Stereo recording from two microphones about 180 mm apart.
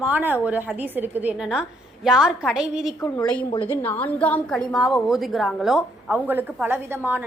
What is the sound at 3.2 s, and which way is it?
A woman's voice, 5° left (ahead or behind).